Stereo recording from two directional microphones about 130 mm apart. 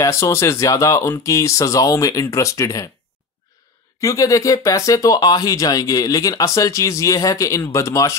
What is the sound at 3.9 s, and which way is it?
Speech, 25° left (ahead or behind).